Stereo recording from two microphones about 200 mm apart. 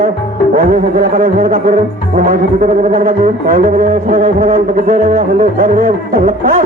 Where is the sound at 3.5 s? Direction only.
45° right (ahead or behind).